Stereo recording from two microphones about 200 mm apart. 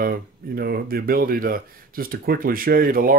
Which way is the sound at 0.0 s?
50° right (ahead or behind).